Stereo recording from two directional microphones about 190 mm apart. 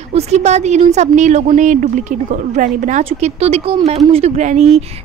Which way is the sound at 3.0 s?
30° right (ahead or behind).